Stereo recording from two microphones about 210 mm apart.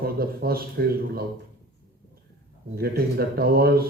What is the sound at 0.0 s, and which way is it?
A man's voice, 45° right (ahead or behind).